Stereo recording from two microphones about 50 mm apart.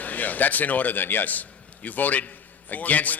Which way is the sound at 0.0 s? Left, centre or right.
Left.